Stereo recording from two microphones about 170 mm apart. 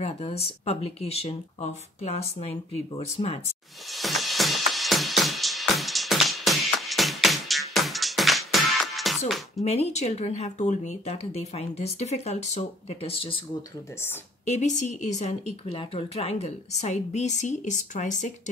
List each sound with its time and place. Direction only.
0.0 s speech: 35° left (ahead or behind)
3.9 s music: centre (ahead or behind)
9.7 s speech: 40° left (ahead or behind)
14.4 s speech: 40° left (ahead or behind)